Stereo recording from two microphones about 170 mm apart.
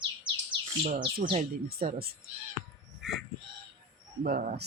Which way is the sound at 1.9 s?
65° right (ahead or behind).